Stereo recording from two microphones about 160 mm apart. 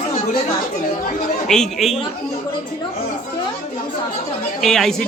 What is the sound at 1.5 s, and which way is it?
Speech, centre (ahead or behind).